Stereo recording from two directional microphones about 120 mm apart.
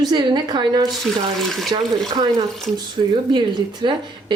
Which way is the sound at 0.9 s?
Centre (ahead or behind).